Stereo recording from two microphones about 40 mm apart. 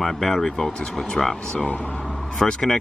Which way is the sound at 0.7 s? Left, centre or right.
Left.